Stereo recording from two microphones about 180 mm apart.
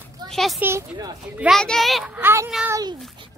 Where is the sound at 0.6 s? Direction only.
15° right (ahead or behind).